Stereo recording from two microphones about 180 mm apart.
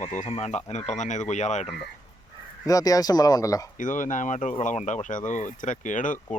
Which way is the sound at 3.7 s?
45° left (ahead or behind).